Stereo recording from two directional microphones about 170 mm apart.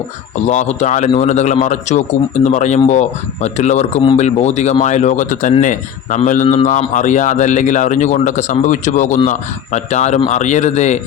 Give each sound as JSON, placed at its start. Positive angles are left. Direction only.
{"t": 0.4, "sound": "speech", "side_deg": 40}